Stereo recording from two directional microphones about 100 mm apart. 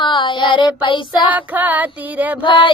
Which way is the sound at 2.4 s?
55° left (ahead or behind).